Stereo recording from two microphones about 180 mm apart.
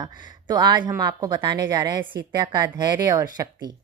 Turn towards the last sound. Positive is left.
turn(degrees=-20)  # may be behind; listen again after turning